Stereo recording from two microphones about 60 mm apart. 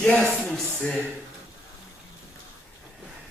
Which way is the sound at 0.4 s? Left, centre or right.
Centre.